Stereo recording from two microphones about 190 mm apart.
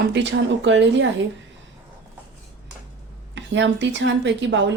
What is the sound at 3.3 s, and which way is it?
A woman's voice, 70° right (ahead or behind).